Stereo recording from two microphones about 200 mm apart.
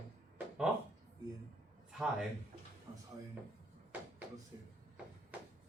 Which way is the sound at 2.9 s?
25° right (ahead or behind).